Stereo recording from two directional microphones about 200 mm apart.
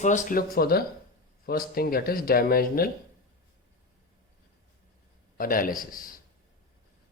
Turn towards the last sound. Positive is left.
turn(degrees=45)  # may be behind; listen again after turning